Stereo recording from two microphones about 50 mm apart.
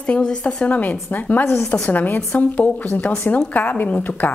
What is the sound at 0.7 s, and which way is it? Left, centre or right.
A woman's voice, left.